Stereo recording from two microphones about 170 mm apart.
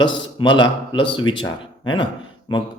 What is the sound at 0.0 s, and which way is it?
Speech, 30° left (ahead or behind).